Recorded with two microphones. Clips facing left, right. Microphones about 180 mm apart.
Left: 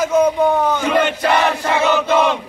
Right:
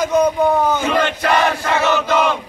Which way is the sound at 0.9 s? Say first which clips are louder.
Left 1 dB; 20° left (ahead or behind).